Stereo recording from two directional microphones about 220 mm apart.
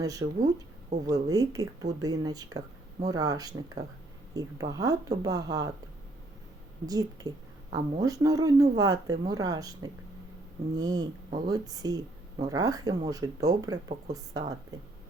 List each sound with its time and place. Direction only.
0.0 s a woman's voice: 15° right (ahead or behind)
6.8 s a woman's voice: 15° right (ahead or behind)